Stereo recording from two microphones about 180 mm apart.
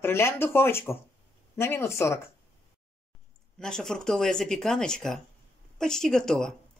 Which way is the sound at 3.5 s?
5° left (ahead or behind).